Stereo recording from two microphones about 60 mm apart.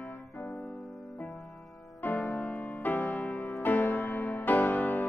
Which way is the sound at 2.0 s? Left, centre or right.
Left.